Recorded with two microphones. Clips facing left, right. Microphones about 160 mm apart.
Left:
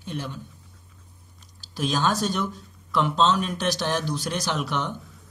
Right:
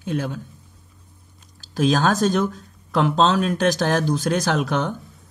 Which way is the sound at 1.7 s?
50° right (ahead or behind).